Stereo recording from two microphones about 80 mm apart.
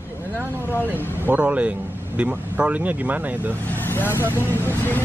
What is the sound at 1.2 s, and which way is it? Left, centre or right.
Speech, centre.